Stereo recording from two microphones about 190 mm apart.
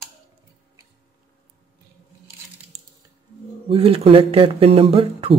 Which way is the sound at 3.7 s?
30° right (ahead or behind).